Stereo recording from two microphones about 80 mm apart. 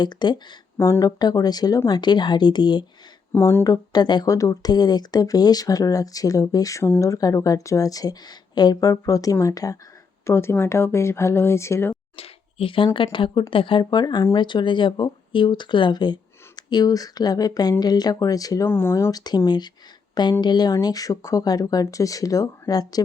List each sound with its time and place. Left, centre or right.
0.0 s speech: left
0.8 s speech: left
1.2 s speech: left
1.9 s a woman's voice: left
3.3 s speech: left
3.6 s speech: left
4.0 s a woman's voice: left
4.3 s speech: left
10.2 s speech: left
12.7 s a woman's voice: left
14.3 s speech: left
18.7 s speech: left
19.1 s speech: left
20.8 s speech: left